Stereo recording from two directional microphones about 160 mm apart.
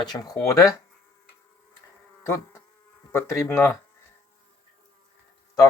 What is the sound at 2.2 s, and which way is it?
Speech, 15° left (ahead or behind).